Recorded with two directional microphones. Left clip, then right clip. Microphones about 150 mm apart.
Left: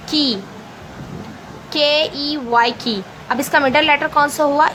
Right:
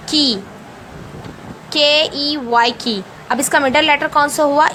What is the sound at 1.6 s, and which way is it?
A woman's voice, 35° right (ahead or behind).